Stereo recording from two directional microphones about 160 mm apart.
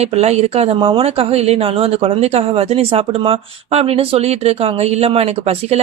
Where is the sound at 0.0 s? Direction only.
40° right (ahead or behind).